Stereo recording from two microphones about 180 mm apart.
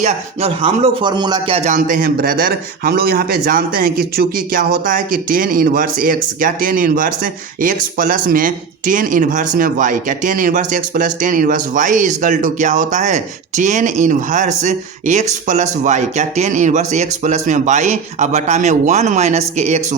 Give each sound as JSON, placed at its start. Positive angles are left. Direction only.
{"t": 0.0, "sound": "speech", "side_deg": -35}